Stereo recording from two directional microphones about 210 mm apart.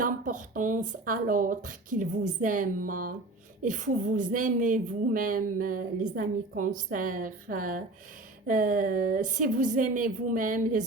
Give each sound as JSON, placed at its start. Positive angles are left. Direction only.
{"t": 0.0, "sound": "speech", "side_deg": -40}